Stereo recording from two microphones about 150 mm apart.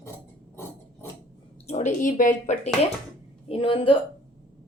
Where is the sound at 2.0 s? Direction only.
60° left (ahead or behind).